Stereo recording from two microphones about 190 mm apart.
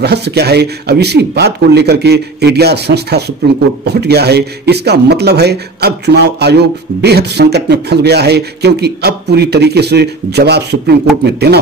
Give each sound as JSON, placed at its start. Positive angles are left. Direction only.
{"t": 0.0, "sound": "a man's voice", "side_deg": -60}